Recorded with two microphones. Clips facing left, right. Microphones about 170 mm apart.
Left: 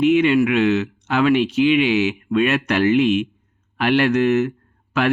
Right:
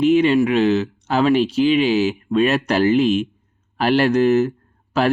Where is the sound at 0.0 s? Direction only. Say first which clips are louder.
Right 1 dB; 35° right (ahead or behind).